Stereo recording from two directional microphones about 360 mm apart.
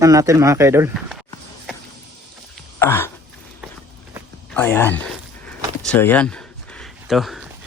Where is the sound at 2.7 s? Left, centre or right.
Centre.